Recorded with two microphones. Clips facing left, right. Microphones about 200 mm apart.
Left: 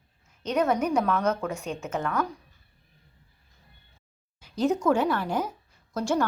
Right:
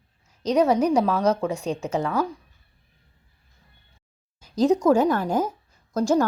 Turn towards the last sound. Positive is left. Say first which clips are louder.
# right 6 dB
turn(degrees=-40)  # may be behind; listen again after turning